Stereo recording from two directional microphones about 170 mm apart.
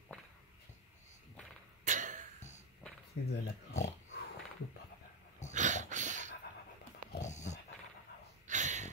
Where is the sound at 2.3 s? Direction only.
45° left (ahead or behind).